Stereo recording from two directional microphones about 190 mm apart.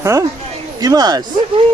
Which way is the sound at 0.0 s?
15° right (ahead or behind).